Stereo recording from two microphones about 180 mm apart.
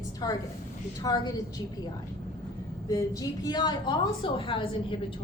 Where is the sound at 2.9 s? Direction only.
20° left (ahead or behind).